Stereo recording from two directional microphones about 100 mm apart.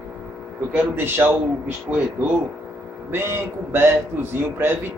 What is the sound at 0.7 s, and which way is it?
A man's voice, 20° right (ahead or behind).